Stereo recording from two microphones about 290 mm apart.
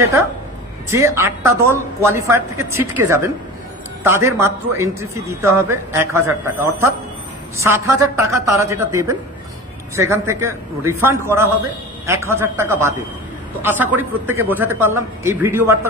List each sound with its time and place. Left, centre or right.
0.8 s a man's voice: centre